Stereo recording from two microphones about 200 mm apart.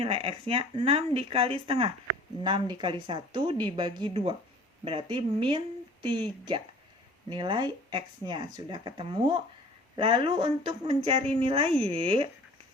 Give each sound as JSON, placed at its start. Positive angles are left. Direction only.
{"t": 0.0, "sound": "speech", "side_deg": -25}
{"t": 7.3, "sound": "speech", "side_deg": -20}